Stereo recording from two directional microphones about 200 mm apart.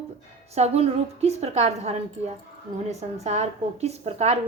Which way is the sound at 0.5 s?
30° right (ahead or behind).